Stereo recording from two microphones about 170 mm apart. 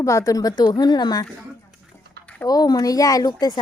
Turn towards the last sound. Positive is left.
turn(degrees=25)  # may be behind; listen again after turning